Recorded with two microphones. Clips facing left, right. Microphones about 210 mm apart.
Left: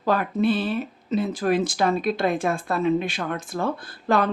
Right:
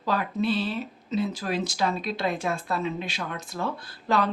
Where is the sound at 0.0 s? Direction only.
55° left (ahead or behind).